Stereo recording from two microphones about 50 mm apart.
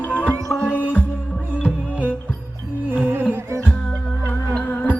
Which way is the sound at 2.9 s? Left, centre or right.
Right.